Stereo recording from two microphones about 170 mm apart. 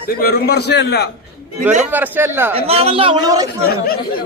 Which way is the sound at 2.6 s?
35° right (ahead or behind).